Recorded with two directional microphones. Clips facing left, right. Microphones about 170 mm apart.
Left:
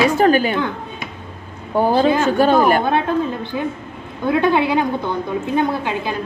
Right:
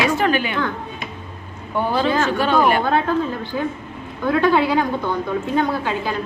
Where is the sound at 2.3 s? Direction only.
40° left (ahead or behind).